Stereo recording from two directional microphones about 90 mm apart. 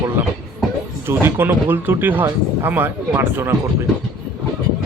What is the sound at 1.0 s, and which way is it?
Speech, 25° right (ahead or behind).